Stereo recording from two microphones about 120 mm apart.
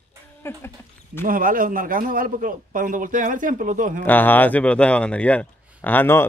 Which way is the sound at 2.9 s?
90° right.